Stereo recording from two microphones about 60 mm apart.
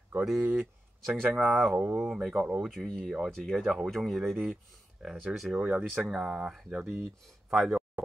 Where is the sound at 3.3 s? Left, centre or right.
Centre.